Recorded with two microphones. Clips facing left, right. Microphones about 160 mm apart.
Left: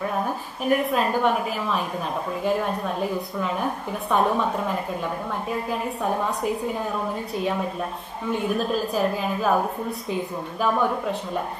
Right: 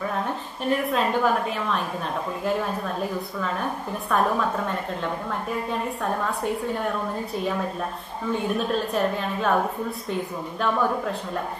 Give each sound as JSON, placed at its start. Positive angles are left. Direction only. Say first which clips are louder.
{"t": 0.0, "sound": "a woman's voice", "louder": "left 1 dB", "side_deg": 10}
{"t": 4.1, "sound": "a woman's voice", "louder": "left 1 dB", "side_deg": 25}
{"t": 4.4, "sound": "a woman's voice", "louder": "left 1 dB", "side_deg": 5}